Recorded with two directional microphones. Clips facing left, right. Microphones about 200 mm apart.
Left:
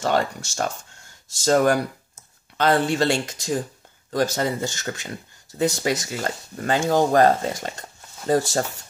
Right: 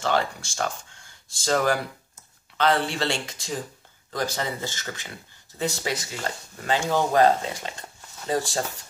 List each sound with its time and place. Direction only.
0.0 s speech: 45° left (ahead or behind)